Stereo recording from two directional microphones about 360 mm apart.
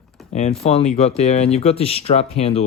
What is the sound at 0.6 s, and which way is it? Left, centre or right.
Speech, centre.